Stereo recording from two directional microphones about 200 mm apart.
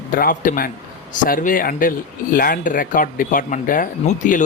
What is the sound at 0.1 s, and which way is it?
Speech, 45° left (ahead or behind).